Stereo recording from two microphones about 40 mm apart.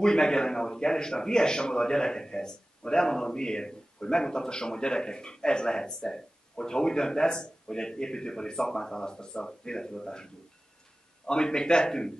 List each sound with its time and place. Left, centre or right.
0.0 s a man's voice: centre